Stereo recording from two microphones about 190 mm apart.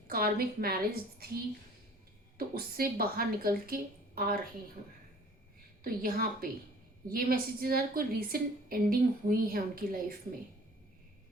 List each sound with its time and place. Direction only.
0.1 s a woman's voice: 50° right (ahead or behind)
2.4 s a woman's voice: 50° right (ahead or behind)
5.8 s a woman's voice: 50° right (ahead or behind)